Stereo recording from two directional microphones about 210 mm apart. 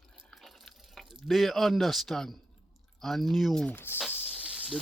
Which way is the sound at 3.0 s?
Centre (ahead or behind).